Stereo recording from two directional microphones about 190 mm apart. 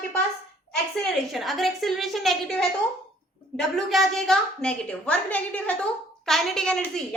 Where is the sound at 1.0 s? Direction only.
Centre (ahead or behind).